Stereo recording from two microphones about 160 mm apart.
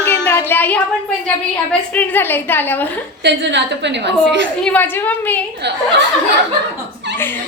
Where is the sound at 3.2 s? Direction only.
90° right.